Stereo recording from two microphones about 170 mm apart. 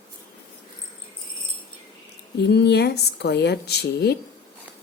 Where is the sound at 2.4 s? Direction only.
80° left.